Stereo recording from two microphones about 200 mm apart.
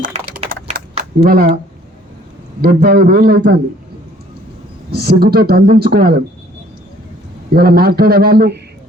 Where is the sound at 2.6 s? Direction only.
50° right (ahead or behind).